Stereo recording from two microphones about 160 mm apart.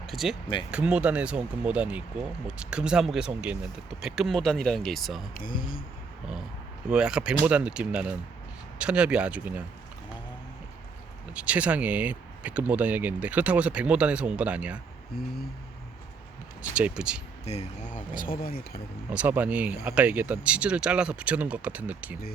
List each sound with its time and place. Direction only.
0.1 s speech: centre (ahead or behind)
5.3 s speech: 60° left (ahead or behind)
6.9 s speech: 5° right (ahead or behind)
11.3 s speech: 10° right (ahead or behind)
16.7 s speech: 5° right (ahead or behind)
17.4 s speech: 45° left (ahead or behind); by 18.8 s 65° left (ahead or behind)
19.1 s speech: 10° right (ahead or behind)